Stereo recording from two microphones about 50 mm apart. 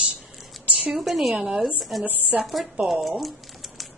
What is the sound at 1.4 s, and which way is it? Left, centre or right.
Speech, centre.